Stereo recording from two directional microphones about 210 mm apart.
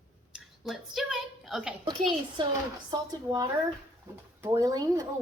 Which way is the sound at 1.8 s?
20° right (ahead or behind).